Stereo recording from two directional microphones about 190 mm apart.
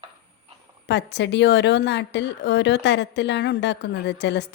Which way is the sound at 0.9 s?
65° left (ahead or behind).